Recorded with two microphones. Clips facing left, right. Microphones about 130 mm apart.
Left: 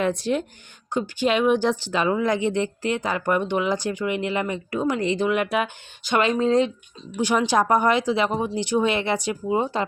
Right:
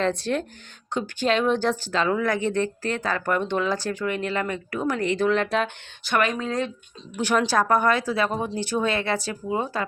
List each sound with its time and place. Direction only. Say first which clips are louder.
0.0 s speech: left 1 dB; 15° left (ahead or behind)
6.1 s speech: left 5 dB; 25° left (ahead or behind)
7.2 s speech: left 1 dB; 15° left (ahead or behind)